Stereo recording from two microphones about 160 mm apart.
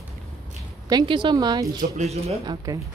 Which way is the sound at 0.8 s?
30° right (ahead or behind).